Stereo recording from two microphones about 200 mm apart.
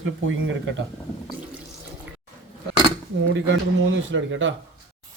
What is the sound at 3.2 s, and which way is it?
Speech, 65° right (ahead or behind).